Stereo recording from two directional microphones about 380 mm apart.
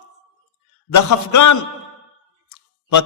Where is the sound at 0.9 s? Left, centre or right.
Left.